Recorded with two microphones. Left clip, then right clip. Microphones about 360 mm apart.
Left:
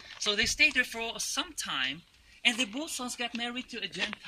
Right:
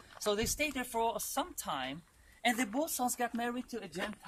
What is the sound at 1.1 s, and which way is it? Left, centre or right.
Speech, centre.